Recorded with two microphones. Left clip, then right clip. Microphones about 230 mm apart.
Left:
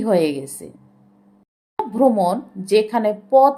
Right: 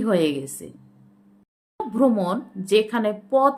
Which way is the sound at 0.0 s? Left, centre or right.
Centre.